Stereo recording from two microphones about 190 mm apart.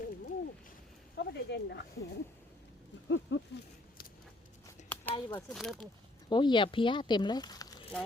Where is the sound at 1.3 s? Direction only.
65° left (ahead or behind).